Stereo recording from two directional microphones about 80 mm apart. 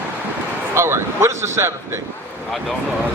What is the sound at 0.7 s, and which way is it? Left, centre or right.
Speech, right.